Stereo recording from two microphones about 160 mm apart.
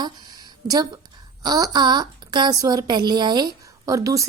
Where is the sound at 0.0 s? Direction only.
25° right (ahead or behind).